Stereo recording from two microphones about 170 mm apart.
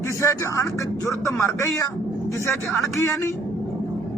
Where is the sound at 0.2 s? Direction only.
20° left (ahead or behind).